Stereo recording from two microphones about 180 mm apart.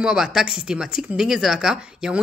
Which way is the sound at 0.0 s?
5° right (ahead or behind).